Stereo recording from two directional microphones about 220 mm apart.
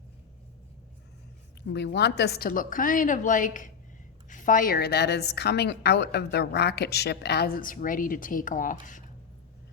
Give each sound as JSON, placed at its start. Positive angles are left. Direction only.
{"t": 1.6, "sound": "a woman's voice", "side_deg": 50}